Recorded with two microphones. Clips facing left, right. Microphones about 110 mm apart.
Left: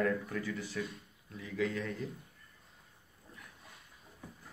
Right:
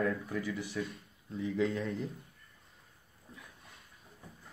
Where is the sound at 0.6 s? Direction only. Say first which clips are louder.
Right 2 dB; 15° right (ahead or behind).